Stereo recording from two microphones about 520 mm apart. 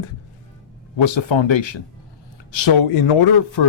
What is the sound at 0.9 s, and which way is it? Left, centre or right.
Speech, left.